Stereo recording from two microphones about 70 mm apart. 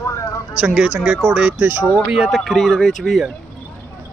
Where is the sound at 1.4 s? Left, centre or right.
Right.